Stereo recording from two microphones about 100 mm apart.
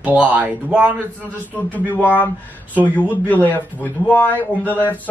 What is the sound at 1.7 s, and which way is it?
Speech, 15° left (ahead or behind).